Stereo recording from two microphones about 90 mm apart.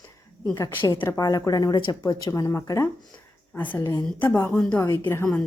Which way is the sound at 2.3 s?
35° left (ahead or behind).